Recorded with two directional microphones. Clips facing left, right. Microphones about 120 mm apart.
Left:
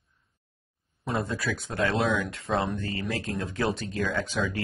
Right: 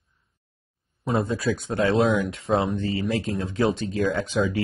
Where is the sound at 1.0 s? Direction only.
25° right (ahead or behind).